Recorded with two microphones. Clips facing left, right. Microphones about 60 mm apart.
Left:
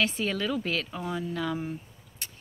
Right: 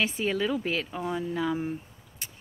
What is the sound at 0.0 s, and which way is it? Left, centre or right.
Speech, centre.